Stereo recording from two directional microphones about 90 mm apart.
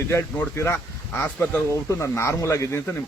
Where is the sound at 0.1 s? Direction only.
30° left (ahead or behind).